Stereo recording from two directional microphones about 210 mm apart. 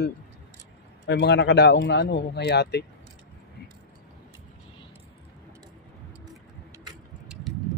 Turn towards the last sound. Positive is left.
turn(degrees=-5)  # may be behind; listen again after turning